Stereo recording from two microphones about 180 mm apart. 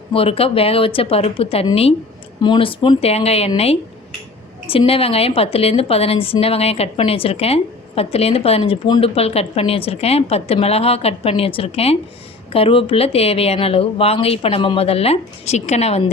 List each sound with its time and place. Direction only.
0.1 s a woman's voice: 30° left (ahead or behind)
4.7 s a woman's voice: 30° left (ahead or behind)